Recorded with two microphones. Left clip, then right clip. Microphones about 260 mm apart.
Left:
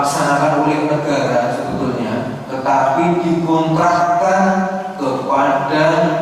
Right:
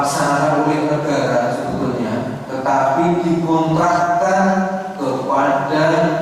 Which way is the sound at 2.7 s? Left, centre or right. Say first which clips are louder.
Left 1 dB; centre.